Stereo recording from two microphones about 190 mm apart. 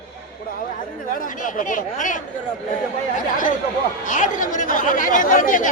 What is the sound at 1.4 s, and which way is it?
Speech, 45° left (ahead or behind).